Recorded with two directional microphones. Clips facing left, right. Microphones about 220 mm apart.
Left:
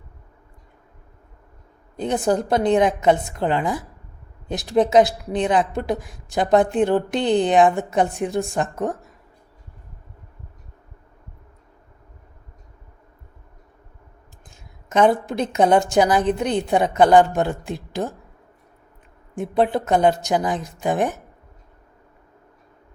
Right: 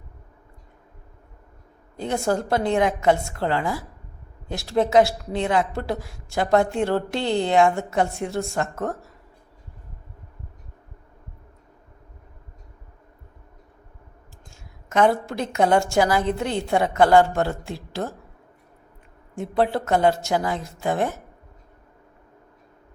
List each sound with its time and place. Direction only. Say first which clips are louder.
2.0 s a woman's voice: left 3 dB; 20° left (ahead or behind)
14.5 s a woman's voice: left 2 dB; 20° left (ahead or behind)
19.4 s a woman's voice: left 2 dB; 15° left (ahead or behind)